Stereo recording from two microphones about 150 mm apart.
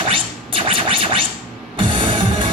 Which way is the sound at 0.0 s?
35° right (ahead or behind).